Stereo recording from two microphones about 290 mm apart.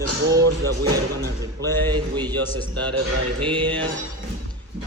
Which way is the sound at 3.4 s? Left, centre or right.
Centre.